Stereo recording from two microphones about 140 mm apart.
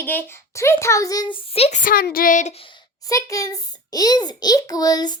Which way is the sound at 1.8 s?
90° left.